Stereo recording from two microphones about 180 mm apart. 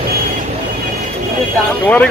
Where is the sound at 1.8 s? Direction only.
5° left (ahead or behind).